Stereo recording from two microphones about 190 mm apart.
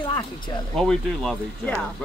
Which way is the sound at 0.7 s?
5° left (ahead or behind).